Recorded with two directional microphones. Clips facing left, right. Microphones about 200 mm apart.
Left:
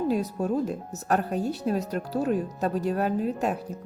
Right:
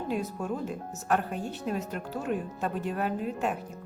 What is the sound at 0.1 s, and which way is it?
Speech, 40° left (ahead or behind).